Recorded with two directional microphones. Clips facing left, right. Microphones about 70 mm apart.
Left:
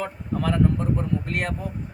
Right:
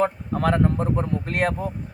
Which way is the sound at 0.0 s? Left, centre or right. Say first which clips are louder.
Right 5 dB; right.